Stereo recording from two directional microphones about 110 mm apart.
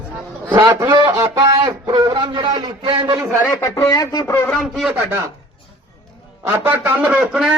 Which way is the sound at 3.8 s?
35° left (ahead or behind).